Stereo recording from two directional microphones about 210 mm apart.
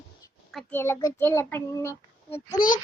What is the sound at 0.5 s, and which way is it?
A child's voice, 10° left (ahead or behind).